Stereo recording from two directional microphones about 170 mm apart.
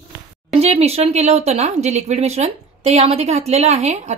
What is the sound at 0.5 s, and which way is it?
Speech, 35° right (ahead or behind).